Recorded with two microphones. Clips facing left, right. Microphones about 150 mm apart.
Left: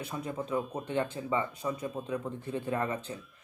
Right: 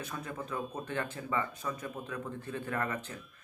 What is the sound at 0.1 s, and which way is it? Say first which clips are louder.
Speech: left 9 dB; 20° left (ahead or behind).